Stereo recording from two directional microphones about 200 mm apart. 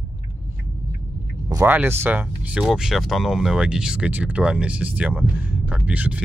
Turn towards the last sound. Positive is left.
turn(degrees=-5)  # may be behind; listen again after turning